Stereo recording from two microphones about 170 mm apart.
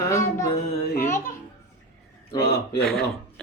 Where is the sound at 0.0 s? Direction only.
15° left (ahead or behind).